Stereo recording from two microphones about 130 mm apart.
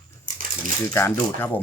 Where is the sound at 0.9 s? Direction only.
20° left (ahead or behind).